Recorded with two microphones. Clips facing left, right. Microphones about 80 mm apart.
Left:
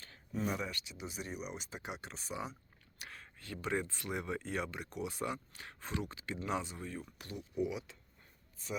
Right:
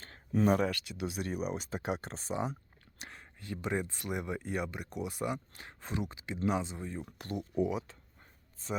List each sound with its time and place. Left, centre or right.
0.4 s speech: right
3.0 s speech: right
7.0 s speech: right